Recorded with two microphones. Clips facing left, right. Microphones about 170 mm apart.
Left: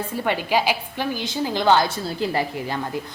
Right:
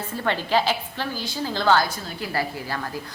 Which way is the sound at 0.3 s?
10° left (ahead or behind).